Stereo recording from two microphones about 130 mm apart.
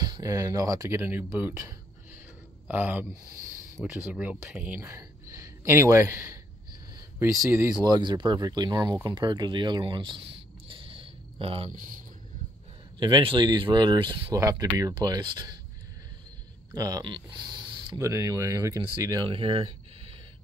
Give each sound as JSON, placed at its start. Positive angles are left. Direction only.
{"t": 0.0, "sound": "speech", "side_deg": -30}
{"t": 3.8, "sound": "speech", "side_deg": 5}
{"t": 4.1, "sound": "speech", "side_deg": -10}
{"t": 4.8, "sound": "a sound", "side_deg": -25}
{"t": 7.7, "sound": "speech", "side_deg": -35}
{"t": 13.0, "sound": "speech", "side_deg": -40}
{"t": 14.3, "sound": "speech", "side_deg": -25}
{"t": 16.7, "sound": "speech", "side_deg": -25}
{"t": 17.0, "sound": "speech", "side_deg": -40}
{"t": 19.3, "sound": "a sound", "side_deg": -45}